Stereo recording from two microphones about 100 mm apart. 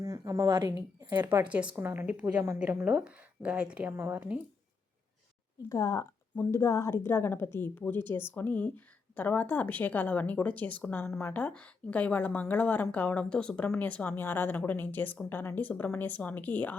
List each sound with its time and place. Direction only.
0.0 s a sound: 35° right (ahead or behind)
1.5 s a woman's voice: 10° right (ahead or behind)
5.6 s a woman's voice: 35° left (ahead or behind); by 16.7 s 15° left (ahead or behind)